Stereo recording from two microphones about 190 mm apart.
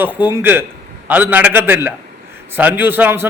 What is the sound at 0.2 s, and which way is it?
Speech, 25° left (ahead or behind).